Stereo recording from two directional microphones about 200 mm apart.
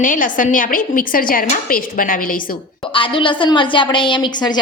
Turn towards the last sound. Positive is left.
turn(degrees=20)  # may be behind; listen again after turning